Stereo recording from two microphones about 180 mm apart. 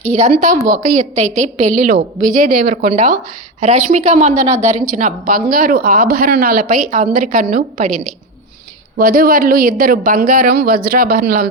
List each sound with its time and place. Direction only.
0.1 s a woman's voice: 35° right (ahead or behind); by 2.9 s 55° right (ahead or behind)
2.9 s a woman's voice: 40° right (ahead or behind)